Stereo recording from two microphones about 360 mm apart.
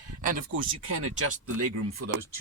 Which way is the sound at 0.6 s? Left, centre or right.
Right.